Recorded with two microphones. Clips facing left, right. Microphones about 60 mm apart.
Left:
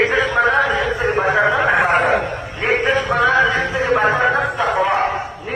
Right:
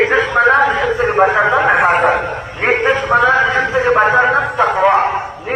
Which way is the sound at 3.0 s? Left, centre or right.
Right.